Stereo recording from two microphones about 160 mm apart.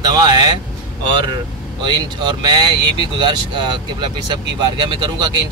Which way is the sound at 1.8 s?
30° right (ahead or behind).